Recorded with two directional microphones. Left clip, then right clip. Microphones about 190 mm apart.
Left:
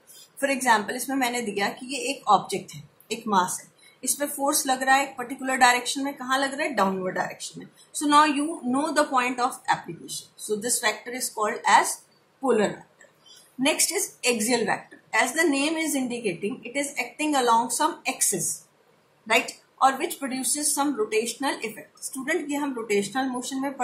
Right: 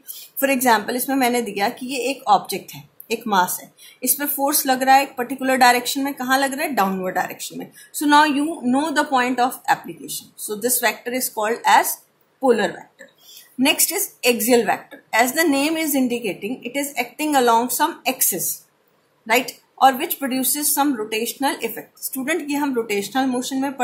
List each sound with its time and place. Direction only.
0.7 s a woman's voice: 45° right (ahead or behind)
8.0 s a woman's voice: 40° right (ahead or behind)
19.2 s a woman's voice: 45° right (ahead or behind)